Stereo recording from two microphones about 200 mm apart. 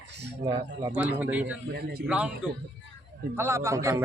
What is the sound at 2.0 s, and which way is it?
A man's voice, 5° right (ahead or behind).